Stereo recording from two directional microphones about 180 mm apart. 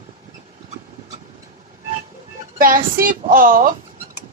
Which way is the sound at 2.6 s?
50° right (ahead or behind).